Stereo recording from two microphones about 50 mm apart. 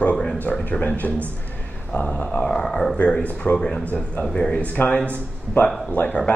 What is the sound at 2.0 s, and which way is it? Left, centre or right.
Speech, centre.